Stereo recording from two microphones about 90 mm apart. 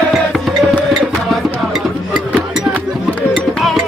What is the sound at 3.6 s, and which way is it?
Music, centre (ahead or behind).